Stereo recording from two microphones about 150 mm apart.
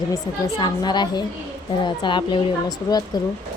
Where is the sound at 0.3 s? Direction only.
30° left (ahead or behind).